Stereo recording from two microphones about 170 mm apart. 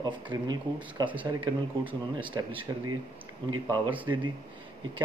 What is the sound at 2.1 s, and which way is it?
Speech, 30° right (ahead or behind).